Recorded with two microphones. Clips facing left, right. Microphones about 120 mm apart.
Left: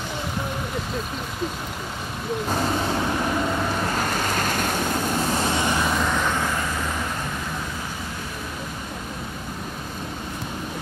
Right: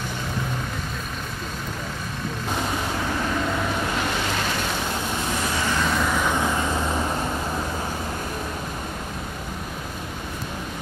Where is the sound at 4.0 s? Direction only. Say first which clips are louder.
Left 1 dB; 45° left (ahead or behind).